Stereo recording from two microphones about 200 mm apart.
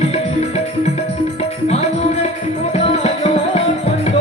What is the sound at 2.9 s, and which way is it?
Tabla, 30° left (ahead or behind).